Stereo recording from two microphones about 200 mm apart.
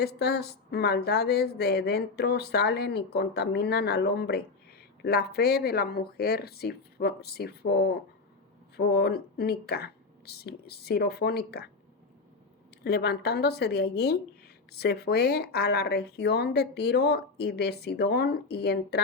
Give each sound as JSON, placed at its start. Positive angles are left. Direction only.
{"t": 0.0, "sound": "speech", "side_deg": 55}
{"t": 12.8, "sound": "speech", "side_deg": 55}